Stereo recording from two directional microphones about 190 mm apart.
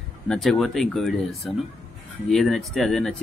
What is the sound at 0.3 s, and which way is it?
Speech, centre (ahead or behind).